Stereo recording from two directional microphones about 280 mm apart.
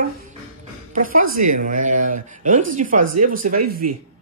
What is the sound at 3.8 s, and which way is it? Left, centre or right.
Speech, right.